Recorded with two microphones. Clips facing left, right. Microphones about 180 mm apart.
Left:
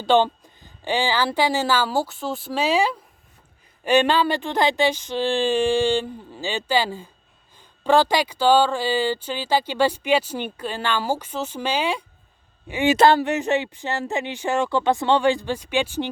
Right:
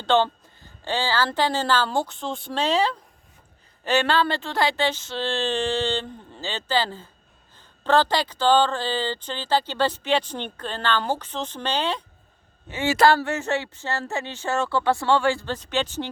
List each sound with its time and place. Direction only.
0.0 s speech: 15° left (ahead or behind)